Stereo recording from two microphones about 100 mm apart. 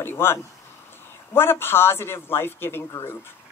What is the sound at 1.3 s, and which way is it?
Speech, 20° left (ahead or behind).